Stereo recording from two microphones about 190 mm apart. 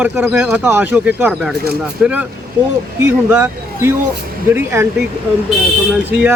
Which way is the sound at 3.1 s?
10° right (ahead or behind).